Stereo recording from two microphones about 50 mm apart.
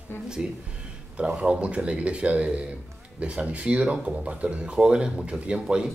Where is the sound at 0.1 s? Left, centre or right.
Left.